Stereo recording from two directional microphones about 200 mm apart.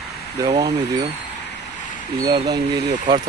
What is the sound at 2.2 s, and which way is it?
Speech, 20° right (ahead or behind).